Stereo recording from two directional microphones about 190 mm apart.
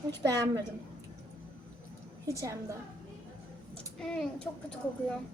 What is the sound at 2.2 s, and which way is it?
Speech, 15° right (ahead or behind).